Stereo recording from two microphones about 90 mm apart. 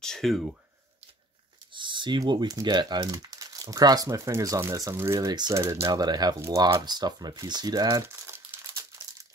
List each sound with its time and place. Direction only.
0.0 s speech: 5° left (ahead or behind)
1.7 s speech: 65° right (ahead or behind); by 4.1 s 45° right (ahead or behind)
4.1 s speech: 35° right (ahead or behind); by 6.3 s 50° right (ahead or behind)
6.4 s speech: 35° right (ahead or behind)
6.8 s speech: 50° right (ahead or behind)